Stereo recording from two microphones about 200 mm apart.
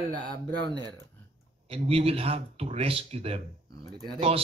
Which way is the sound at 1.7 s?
30° right (ahead or behind).